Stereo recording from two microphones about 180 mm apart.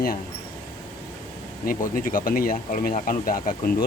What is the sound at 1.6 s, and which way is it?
Speech, 50° left (ahead or behind).